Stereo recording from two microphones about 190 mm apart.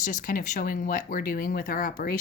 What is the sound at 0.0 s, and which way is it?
Speech, 45° left (ahead or behind).